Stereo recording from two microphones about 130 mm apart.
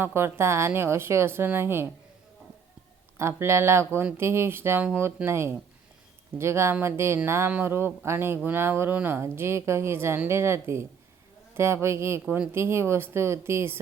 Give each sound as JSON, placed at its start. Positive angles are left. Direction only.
{"t": 0.0, "sound": "a woman's voice", "side_deg": -20}
{"t": 3.2, "sound": "a woman's voice", "side_deg": -20}